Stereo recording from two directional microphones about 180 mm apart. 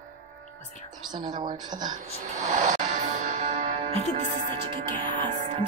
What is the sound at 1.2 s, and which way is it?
Music, 25° right (ahead or behind).